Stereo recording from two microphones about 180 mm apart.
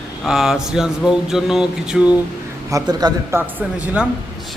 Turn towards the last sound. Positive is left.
turn(degrees=-5)  # may be behind; listen again after turning